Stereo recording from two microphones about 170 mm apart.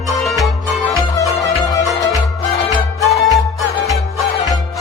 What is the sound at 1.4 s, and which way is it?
Music, 20° left (ahead or behind).